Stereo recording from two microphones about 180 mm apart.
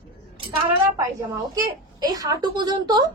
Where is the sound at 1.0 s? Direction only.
20° right (ahead or behind).